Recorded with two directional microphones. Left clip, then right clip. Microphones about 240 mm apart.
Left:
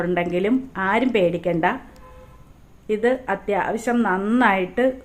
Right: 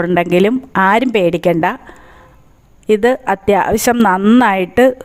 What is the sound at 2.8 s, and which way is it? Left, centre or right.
Speech, right.